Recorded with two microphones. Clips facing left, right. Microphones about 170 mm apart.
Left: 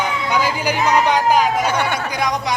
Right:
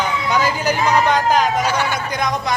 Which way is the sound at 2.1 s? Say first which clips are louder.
Even; 10° left (ahead or behind).